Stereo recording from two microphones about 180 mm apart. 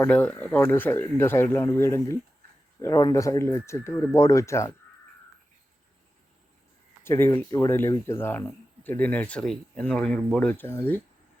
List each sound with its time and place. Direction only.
0.0 s speech: 10° left (ahead or behind)
7.0 s speech: 15° left (ahead or behind)